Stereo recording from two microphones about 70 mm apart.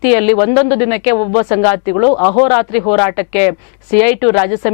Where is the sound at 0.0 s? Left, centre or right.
Centre.